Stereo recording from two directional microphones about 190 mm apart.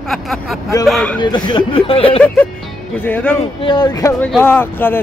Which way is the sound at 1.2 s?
25° left (ahead or behind).